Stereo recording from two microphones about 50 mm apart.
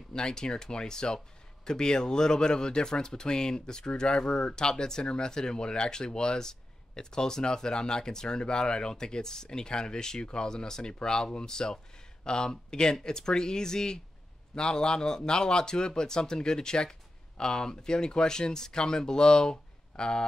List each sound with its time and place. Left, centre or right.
0.1 s speech: centre